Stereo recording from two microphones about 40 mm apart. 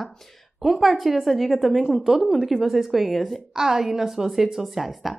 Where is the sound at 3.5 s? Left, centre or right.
Centre.